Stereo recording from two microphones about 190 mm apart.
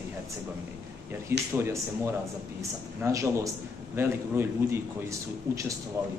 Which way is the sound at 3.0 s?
15° right (ahead or behind).